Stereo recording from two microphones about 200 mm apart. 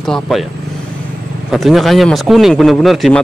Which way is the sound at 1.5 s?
Centre (ahead or behind).